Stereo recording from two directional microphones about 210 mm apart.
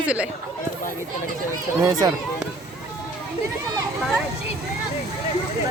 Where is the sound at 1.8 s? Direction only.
15° right (ahead or behind).